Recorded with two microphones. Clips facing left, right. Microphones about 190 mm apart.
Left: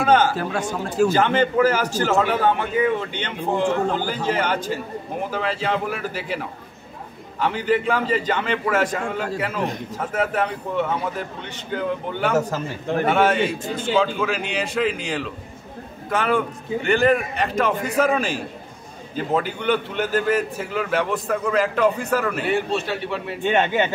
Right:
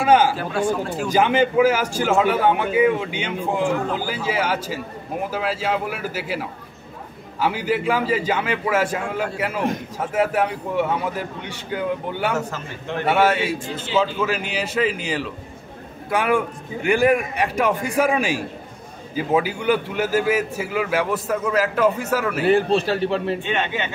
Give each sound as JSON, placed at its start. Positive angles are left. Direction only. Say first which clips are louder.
{"t": 0.0, "sound": "a man's voice", "louder": "right 1 dB", "side_deg": -10}
{"t": 0.4, "sound": "speech", "louder": "right 3 dB", "side_deg": 45}
{"t": 1.1, "sound": "a man's voice", "louder": "right 1 dB", "side_deg": -10}
{"t": 12.4, "sound": "a man's voice", "louder": "left 5 dB", "side_deg": 40}
{"t": 13.0, "sound": "a man's voice", "louder": "even", "side_deg": -5}
{"t": 22.5, "sound": "a man's voice", "louder": "right 8 dB", "side_deg": -35}
{"t": 23.4, "sound": "speech", "louder": "left 5 dB", "side_deg": 45}